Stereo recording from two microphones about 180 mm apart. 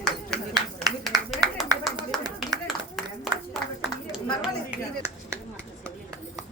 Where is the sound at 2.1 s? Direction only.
Centre (ahead or behind).